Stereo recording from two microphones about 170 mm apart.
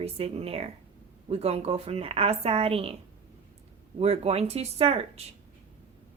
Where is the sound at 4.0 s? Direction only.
40° right (ahead or behind).